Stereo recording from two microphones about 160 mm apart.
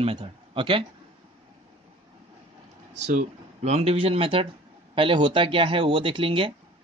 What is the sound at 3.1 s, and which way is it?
Speech, 45° right (ahead or behind).